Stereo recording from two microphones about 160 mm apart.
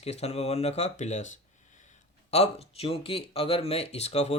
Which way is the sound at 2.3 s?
40° left (ahead or behind).